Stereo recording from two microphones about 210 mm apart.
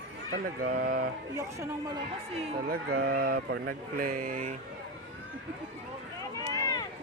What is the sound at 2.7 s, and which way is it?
Speech, 50° right (ahead or behind).